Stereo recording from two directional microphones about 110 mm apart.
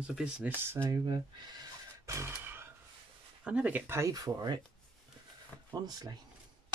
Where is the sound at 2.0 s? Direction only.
25° right (ahead or behind).